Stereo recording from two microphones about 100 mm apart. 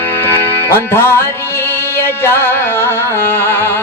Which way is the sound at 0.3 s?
25° left (ahead or behind).